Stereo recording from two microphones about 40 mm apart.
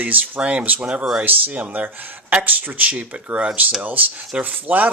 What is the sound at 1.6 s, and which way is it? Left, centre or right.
Speech, right.